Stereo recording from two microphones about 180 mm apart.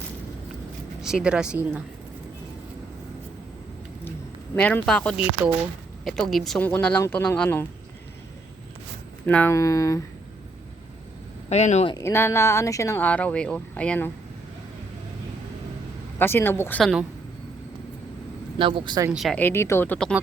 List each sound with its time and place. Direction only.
1.0 s speech: 5° right (ahead or behind)
4.5 s speech: 5° left (ahead or behind)
9.2 s speech: 10° left (ahead or behind)
11.4 s speech: 40° left (ahead or behind)
11.9 s speech: 15° left (ahead or behind)
16.1 s speech: 10° left (ahead or behind)
16.8 s speech: 5° right (ahead or behind)
18.6 s speech: 25° right (ahead or behind)
19.1 s speech: centre (ahead or behind)
19.4 s speech: 15° left (ahead or behind)